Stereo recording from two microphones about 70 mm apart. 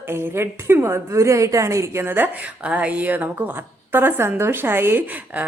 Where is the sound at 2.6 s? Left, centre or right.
Centre.